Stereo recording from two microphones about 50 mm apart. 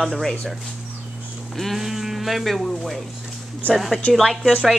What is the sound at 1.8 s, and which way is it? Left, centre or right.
Speech, centre.